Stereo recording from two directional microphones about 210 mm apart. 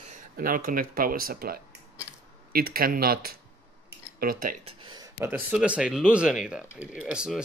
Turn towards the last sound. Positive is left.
turn(degrees=-5)  # may be behind; listen again after turning